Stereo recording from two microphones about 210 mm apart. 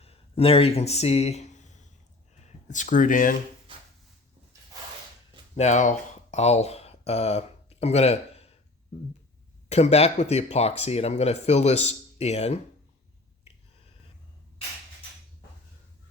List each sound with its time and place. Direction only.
0.0 s a sound: 30° left (ahead or behind)
2.4 s speech: 35° left (ahead or behind)
5.5 s speech: 35° left (ahead or behind)
9.6 s speech: 30° left (ahead or behind)